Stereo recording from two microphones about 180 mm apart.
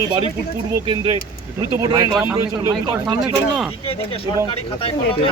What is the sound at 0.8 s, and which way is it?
A man's voice, 25° right (ahead or behind).